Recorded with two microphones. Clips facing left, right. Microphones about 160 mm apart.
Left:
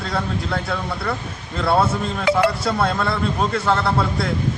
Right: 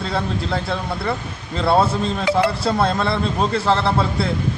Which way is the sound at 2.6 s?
25° right (ahead or behind).